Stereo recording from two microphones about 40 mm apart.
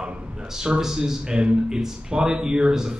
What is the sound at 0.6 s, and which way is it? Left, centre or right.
A man's voice, centre.